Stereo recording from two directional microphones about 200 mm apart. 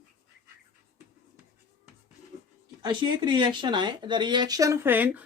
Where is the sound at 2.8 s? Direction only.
25° right (ahead or behind).